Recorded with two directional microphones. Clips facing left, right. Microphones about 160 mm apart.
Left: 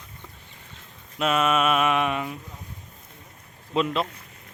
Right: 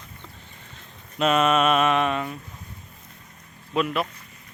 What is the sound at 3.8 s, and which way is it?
Speech, 25° left (ahead or behind).